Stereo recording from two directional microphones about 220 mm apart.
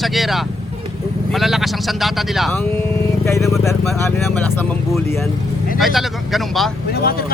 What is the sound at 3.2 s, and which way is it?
Vehicle, 15° left (ahead or behind).